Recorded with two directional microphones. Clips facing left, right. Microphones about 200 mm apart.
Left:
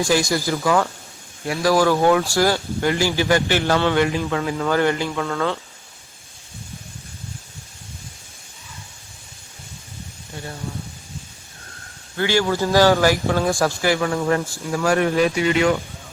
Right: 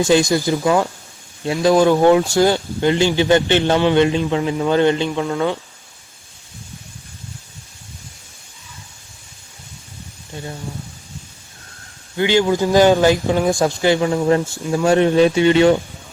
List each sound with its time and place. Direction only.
0.0 s speech: 20° right (ahead or behind)
10.3 s speech: 20° right (ahead or behind)
12.1 s speech: 20° right (ahead or behind)